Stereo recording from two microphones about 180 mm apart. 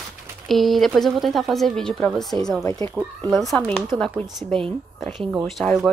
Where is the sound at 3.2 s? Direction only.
Centre (ahead or behind).